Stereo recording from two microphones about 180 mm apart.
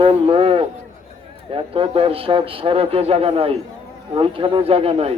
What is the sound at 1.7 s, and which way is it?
A man's voice, 30° right (ahead or behind).